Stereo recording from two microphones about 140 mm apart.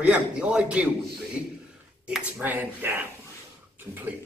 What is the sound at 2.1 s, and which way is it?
Speech, 10° right (ahead or behind).